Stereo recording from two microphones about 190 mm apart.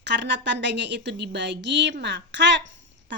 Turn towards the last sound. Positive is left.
turn(degrees=-75)  # may be behind; listen again after turning